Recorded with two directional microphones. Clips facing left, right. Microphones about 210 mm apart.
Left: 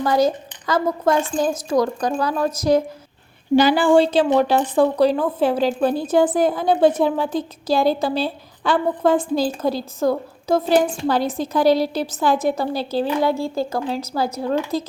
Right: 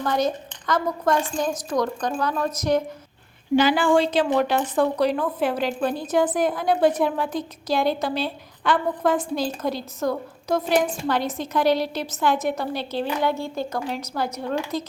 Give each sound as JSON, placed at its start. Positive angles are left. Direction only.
{"t": 0.0, "sound": "speech", "side_deg": 10}
{"t": 1.4, "sound": "a woman's voice", "side_deg": 30}